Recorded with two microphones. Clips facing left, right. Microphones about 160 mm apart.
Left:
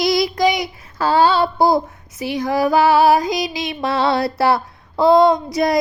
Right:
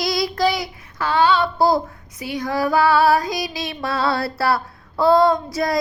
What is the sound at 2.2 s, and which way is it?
Music, 25° left (ahead or behind).